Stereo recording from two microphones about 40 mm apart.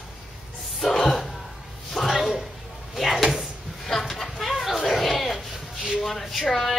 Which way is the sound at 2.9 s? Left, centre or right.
Centre.